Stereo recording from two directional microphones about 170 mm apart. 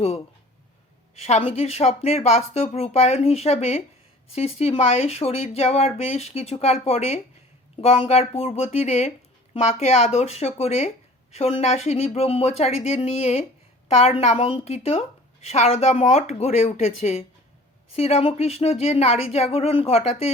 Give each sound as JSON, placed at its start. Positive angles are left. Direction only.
{"t": 1.3, "sound": "a woman's voice", "side_deg": 35}